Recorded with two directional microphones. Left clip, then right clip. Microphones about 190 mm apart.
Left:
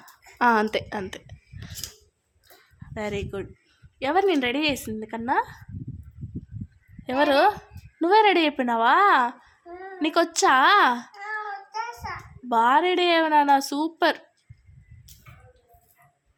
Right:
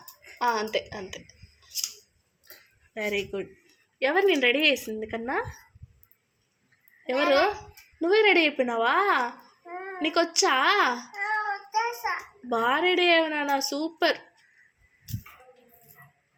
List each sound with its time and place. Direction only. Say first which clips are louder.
0.3 s a woman's voice: left 5 dB; 25° left (ahead or behind)
2.9 s a child's voice: right 1 dB; 15° left (ahead or behind)
7.0 s a child's voice: left 3 dB; 20° left (ahead or behind)